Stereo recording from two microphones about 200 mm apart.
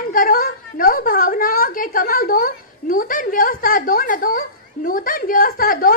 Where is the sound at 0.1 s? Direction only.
45° left (ahead or behind).